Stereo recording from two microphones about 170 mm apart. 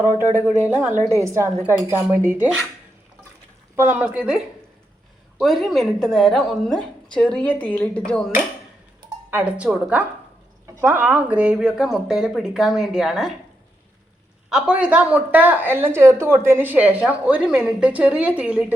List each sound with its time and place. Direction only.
0.0 s speech: 20° left (ahead or behind)
0.7 s a woman's voice: 10° right (ahead or behind)
3.8 s a woman's voice: 10° right (ahead or behind); by 8.3 s 5° left (ahead or behind)
9.3 s a woman's voice: 5° right (ahead or behind)
14.5 s a woman's voice: 5° right (ahead or behind)